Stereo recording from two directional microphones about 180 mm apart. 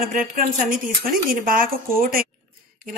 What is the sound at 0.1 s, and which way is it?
Speech, 50° right (ahead or behind).